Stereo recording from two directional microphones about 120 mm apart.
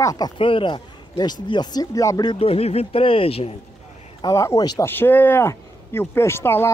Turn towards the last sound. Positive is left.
turn(degrees=20)  # may be behind; listen again after turning